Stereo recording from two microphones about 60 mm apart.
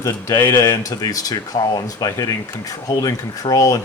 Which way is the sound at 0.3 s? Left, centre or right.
Left.